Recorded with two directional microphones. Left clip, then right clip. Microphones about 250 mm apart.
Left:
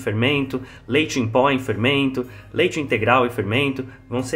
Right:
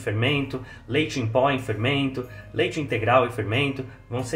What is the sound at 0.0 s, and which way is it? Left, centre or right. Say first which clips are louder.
Speech: left 4 dB; left.